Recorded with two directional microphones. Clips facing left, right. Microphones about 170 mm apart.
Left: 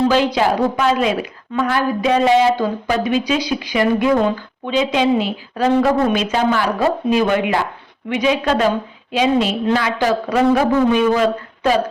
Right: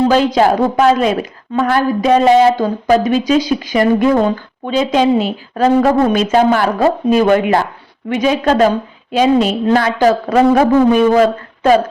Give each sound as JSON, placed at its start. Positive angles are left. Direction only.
{"t": 0.1, "sound": "a woman's voice", "side_deg": -45}